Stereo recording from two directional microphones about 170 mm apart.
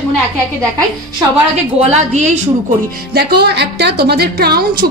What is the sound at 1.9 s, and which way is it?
Speech, 40° right (ahead or behind).